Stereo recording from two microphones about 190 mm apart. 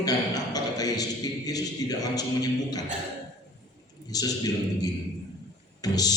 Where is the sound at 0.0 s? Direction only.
20° left (ahead or behind).